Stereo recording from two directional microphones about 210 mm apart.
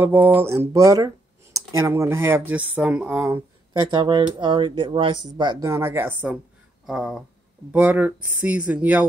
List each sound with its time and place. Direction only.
0.0 s speech: 10° right (ahead or behind)